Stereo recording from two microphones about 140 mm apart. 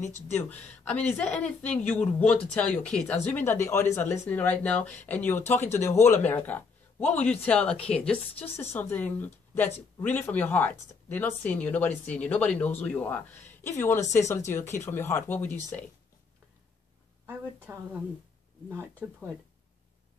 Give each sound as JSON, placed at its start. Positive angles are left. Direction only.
{"t": 0.4, "sound": "speech", "side_deg": 10}
{"t": 17.7, "sound": "speech", "side_deg": -20}
{"t": 19.0, "sound": "speech", "side_deg": -5}